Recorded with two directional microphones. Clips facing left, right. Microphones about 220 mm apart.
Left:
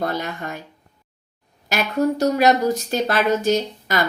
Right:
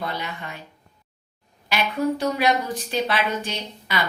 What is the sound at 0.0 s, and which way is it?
Speech, 45° left (ahead or behind).